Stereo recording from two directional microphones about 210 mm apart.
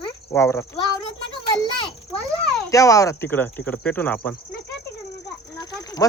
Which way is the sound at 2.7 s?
15° left (ahead or behind).